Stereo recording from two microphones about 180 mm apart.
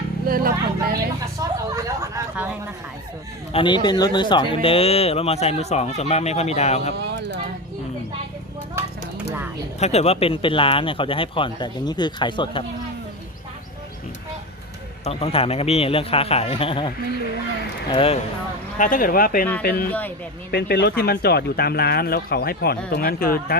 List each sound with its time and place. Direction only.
0.3 s speech: 55° right (ahead or behind)
1.4 s speech: 20° right (ahead or behind)
3.5 s speech: 30° left (ahead or behind)
6.9 s speech: 65° right (ahead or behind)
9.8 s speech: 35° left (ahead or behind)
15.0 s speech: 35° left (ahead or behind)
17.9 s speech: 30° left (ahead or behind)
18.8 s speech: 50° left (ahead or behind)
19.9 s a man's voice: 10° left (ahead or behind)
20.5 s speech: 60° left (ahead or behind)